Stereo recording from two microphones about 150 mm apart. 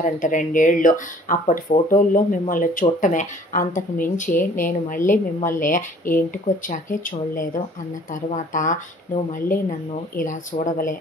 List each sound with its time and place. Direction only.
0.0 s speech: 60° left (ahead or behind)